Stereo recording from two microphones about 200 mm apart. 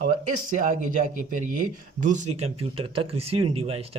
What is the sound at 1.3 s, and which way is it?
Speech, 40° right (ahead or behind).